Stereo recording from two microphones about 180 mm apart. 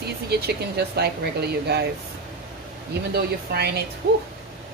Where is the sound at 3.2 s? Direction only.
65° right (ahead or behind).